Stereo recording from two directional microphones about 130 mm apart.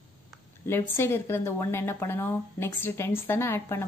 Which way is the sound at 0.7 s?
20° left (ahead or behind).